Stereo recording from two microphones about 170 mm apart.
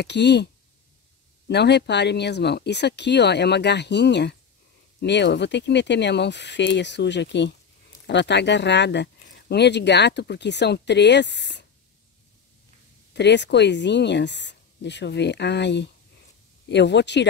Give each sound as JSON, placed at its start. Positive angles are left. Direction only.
{"t": 0.0, "sound": "speech", "side_deg": 90}
{"t": 1.5, "sound": "speech", "side_deg": 80}
{"t": 13.1, "sound": "speech", "side_deg": 90}